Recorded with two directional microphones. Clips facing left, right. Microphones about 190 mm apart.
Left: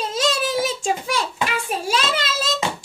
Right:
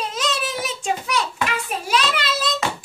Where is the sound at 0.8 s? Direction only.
30° left (ahead or behind).